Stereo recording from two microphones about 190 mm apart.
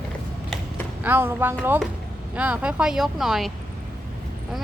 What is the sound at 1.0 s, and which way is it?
Speech, 10° right (ahead or behind).